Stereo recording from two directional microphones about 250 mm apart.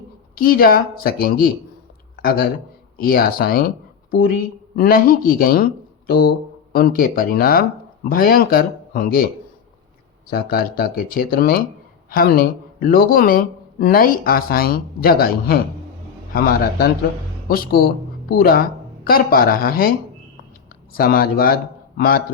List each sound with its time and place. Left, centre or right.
0.3 s speech: left
20.9 s speech: left